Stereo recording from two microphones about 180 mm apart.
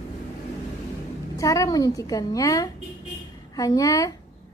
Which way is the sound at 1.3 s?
20° left (ahead or behind).